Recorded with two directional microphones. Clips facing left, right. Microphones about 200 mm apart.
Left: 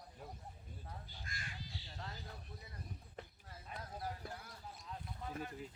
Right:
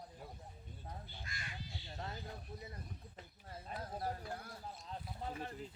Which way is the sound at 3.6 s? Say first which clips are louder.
Right 4 dB; 35° right (ahead or behind).